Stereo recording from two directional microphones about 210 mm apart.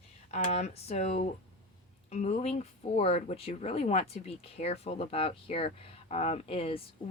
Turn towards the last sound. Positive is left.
turn(degrees=25)  # may be behind; listen again after turning